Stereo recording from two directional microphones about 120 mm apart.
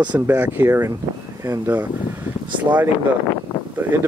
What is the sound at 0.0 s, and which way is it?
Speech, 10° right (ahead or behind).